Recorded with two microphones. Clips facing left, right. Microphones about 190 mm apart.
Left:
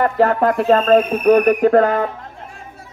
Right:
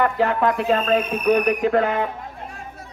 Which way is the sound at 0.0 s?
40° left (ahead or behind).